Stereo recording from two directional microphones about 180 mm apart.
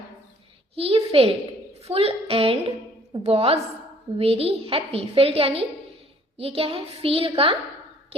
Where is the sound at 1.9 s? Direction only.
35° right (ahead or behind).